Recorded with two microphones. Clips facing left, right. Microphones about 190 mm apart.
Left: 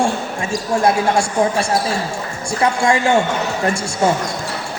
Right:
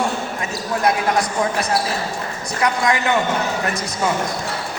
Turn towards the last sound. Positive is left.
turn(degrees=30)  # may be behind; listen again after turning